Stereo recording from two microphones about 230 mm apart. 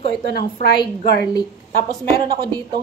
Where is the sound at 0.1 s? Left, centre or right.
Left.